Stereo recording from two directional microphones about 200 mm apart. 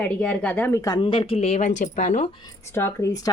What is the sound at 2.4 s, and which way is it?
Speech, 15° left (ahead or behind).